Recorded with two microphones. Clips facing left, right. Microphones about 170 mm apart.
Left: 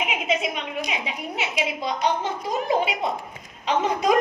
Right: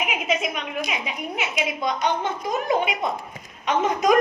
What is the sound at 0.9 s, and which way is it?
A woman's voice, 25° left (ahead or behind).